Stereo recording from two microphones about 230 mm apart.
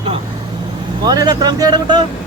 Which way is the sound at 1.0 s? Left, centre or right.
Centre.